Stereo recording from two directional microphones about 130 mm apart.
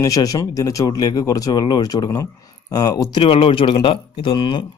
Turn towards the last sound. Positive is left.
turn(degrees=35)  # may be behind; listen again after turning